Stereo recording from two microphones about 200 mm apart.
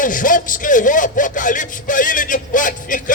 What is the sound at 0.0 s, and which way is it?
Speech, 40° left (ahead or behind).